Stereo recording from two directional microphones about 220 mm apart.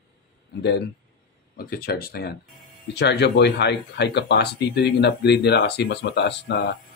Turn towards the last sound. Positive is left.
turn(degrees=50)  # may be behind; listen again after turning